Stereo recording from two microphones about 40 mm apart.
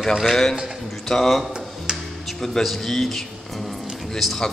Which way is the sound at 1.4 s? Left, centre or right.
Right.